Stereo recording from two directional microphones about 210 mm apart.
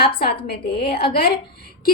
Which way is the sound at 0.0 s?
50° left (ahead or behind).